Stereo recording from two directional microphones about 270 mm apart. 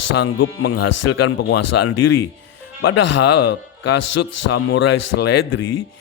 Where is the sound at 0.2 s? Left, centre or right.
Left.